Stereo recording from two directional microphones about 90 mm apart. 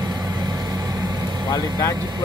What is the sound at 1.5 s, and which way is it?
Speech, 45° left (ahead or behind).